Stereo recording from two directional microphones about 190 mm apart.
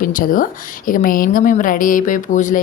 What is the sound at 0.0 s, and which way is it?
A woman's voice, 45° left (ahead or behind).